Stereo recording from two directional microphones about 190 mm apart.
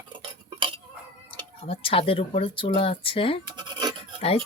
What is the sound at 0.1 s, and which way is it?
Cutlery, 25° right (ahead or behind).